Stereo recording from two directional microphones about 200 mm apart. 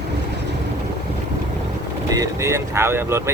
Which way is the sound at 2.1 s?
15° right (ahead or behind).